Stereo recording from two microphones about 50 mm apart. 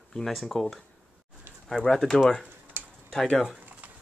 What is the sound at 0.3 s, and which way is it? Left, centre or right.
Speech, centre.